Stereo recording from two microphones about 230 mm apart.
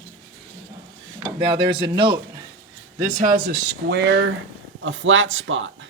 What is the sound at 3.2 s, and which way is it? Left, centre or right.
Speech, right.